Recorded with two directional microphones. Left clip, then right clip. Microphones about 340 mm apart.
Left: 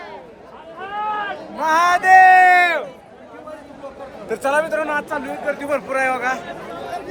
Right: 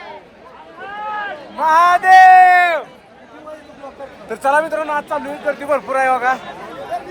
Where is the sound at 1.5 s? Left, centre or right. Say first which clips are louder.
Right 4 dB; centre.